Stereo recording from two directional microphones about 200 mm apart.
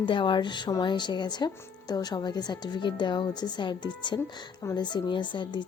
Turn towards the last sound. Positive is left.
turn(degrees=25)  # may be behind; listen again after turning